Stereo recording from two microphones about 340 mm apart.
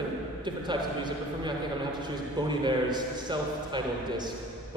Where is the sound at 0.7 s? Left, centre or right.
Centre.